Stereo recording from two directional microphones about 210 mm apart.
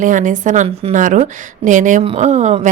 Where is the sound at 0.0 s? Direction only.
40° right (ahead or behind).